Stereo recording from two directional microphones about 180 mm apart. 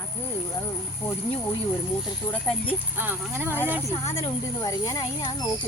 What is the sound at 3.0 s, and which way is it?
Speech, 10° right (ahead or behind).